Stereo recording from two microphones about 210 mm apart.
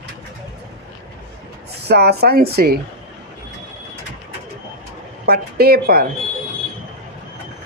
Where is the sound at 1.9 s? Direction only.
50° right (ahead or behind).